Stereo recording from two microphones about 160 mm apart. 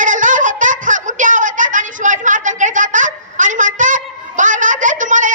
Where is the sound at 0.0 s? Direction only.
55° right (ahead or behind).